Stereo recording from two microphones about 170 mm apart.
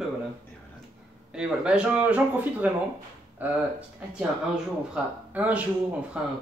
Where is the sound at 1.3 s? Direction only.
5° right (ahead or behind).